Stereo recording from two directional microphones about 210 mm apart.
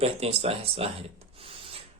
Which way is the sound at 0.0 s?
30° right (ahead or behind).